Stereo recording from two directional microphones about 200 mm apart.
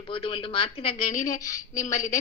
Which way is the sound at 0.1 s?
25° left (ahead or behind).